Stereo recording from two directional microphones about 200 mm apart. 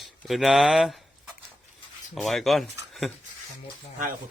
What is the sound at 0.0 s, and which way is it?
Speech, centre (ahead or behind).